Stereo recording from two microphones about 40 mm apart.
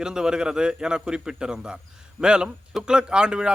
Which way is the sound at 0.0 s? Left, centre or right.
Centre.